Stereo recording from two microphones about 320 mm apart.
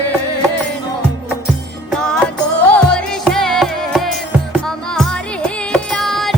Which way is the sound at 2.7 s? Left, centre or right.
Centre.